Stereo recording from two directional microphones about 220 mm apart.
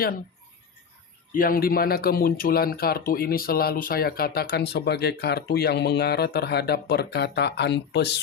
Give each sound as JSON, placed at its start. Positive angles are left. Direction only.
{"t": 1.3, "sound": "speech", "side_deg": 40}